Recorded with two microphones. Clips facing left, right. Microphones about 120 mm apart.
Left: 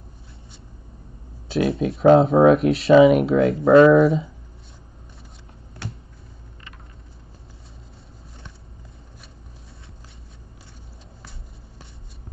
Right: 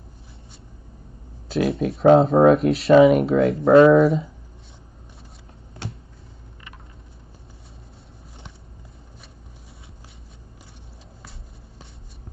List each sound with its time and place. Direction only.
1.5 s speech: centre (ahead or behind)